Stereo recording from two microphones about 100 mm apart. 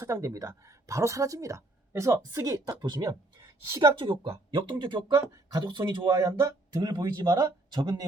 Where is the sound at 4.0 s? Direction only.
60° right (ahead or behind).